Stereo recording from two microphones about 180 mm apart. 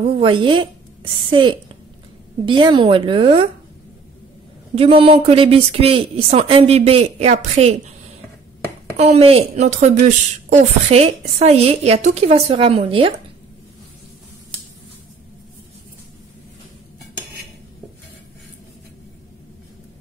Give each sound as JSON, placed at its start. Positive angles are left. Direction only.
{"t": 0.0, "sound": "a woman's voice", "side_deg": -30}
{"t": 4.7, "sound": "speech", "side_deg": -30}
{"t": 8.9, "sound": "speech", "side_deg": -35}